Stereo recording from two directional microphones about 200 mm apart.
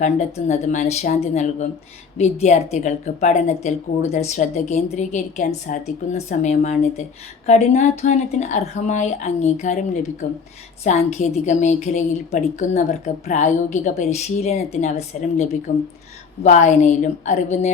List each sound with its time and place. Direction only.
0.0 s a woman's voice: 35° left (ahead or behind)